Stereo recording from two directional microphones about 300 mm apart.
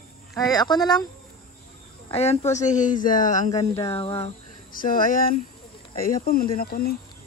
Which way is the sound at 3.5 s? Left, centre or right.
Centre.